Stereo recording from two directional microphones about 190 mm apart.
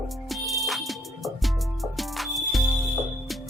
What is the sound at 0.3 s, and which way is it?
Music, centre (ahead or behind).